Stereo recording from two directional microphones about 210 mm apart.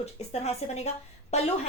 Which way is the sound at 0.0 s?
30° left (ahead or behind).